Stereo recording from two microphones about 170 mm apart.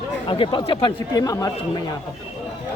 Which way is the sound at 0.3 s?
30° left (ahead or behind).